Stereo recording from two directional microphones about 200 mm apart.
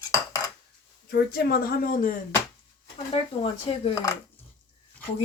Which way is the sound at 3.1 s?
30° left (ahead or behind).